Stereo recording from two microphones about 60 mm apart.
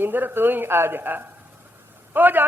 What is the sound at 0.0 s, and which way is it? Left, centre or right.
A man's voice, right.